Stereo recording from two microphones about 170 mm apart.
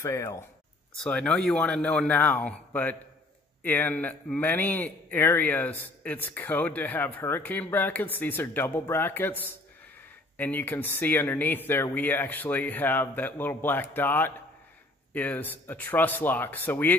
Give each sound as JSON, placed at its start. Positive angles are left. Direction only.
{"t": 0.0, "sound": "speech", "side_deg": 15}
{"t": 10.3, "sound": "speech", "side_deg": 10}